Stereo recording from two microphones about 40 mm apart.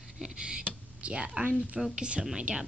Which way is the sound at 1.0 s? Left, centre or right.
Right.